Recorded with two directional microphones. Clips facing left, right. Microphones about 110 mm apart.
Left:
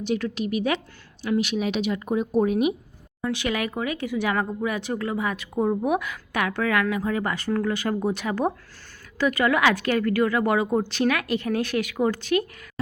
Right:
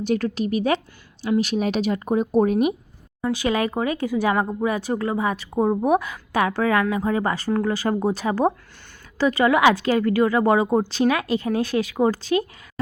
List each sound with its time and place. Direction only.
0.0 s a woman's voice: 45° right (ahead or behind)
3.2 s a woman's voice: 30° right (ahead or behind)